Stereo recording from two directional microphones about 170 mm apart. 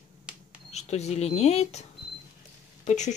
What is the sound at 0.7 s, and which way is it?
Speech, 40° left (ahead or behind).